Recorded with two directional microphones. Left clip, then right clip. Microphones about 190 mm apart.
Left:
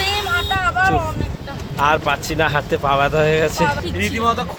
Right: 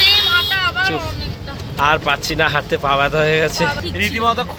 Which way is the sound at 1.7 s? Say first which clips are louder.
Right 1 dB; 5° left (ahead or behind).